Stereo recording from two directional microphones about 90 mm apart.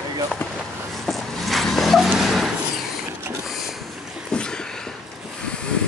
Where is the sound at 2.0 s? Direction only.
5° right (ahead or behind).